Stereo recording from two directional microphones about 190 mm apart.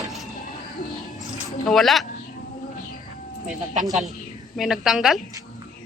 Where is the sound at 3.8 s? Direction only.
Centre (ahead or behind).